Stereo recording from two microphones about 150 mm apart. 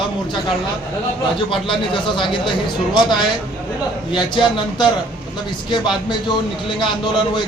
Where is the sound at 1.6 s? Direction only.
35° left (ahead or behind).